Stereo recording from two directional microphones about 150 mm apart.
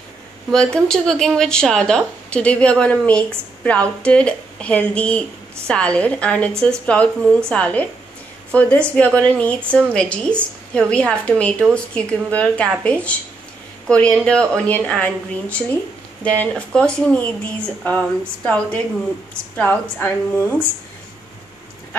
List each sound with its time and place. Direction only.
0.5 s a woman's voice: 5° left (ahead or behind)
16.2 s speech: 10° left (ahead or behind)